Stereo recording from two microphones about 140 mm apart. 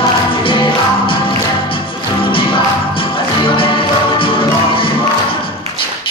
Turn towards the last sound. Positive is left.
turn(degrees=40)  # may be behind; listen again after turning